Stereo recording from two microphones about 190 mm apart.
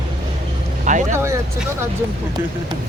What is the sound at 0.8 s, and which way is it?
Speech, 40° right (ahead or behind).